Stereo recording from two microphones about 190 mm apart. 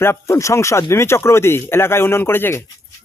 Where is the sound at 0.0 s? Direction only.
15° left (ahead or behind).